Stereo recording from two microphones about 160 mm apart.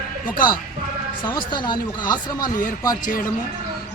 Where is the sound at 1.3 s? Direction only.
30° left (ahead or behind).